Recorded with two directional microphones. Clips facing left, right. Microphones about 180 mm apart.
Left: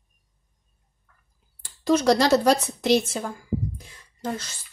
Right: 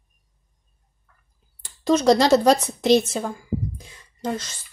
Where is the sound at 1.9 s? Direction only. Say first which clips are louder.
Right 2 dB; 20° right (ahead or behind).